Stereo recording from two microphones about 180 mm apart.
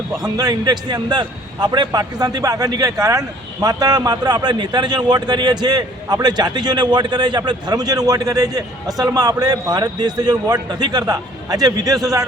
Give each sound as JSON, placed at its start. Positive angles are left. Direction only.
{"t": 0.2, "sound": "a man's voice", "side_deg": -20}